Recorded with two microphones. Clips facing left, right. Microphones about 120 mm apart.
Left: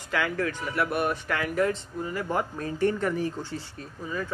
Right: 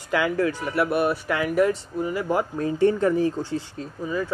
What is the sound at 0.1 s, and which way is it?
Speech, 15° right (ahead or behind).